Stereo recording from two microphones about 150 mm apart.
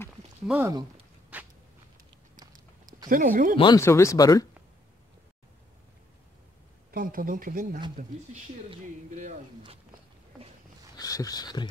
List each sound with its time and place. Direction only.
0.5 s speech: 5° right (ahead or behind)
1.3 s a sound: 10° right (ahead or behind)
2.3 s a sound: 25° right (ahead or behind)
3.1 s speech: 65° right (ahead or behind)
3.5 s speech: 30° left (ahead or behind)
3.8 s speech: 20° left (ahead or behind)
6.9 s speech: 70° right (ahead or behind)
9.1 s speech: 55° right (ahead or behind)
11.0 s speech: 25° left (ahead or behind)